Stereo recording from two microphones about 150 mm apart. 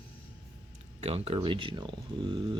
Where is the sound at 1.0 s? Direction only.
40° right (ahead or behind).